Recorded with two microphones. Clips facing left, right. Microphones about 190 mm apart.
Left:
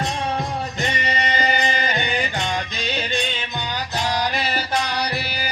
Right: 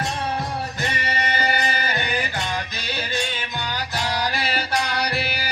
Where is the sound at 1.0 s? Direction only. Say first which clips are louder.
Left 1 dB; 25° left (ahead or behind).